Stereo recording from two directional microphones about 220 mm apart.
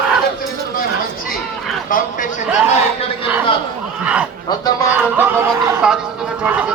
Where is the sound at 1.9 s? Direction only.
35° left (ahead or behind).